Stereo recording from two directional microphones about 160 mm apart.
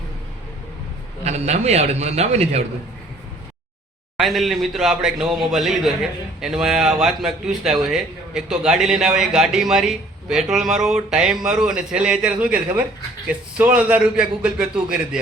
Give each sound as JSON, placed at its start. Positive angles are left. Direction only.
{"t": 1.2, "sound": "a man's voice", "side_deg": -45}
{"t": 4.2, "sound": "a man's voice", "side_deg": 0}